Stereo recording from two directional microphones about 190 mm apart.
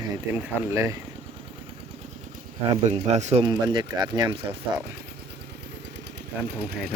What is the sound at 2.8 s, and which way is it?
Speech, 35° right (ahead or behind).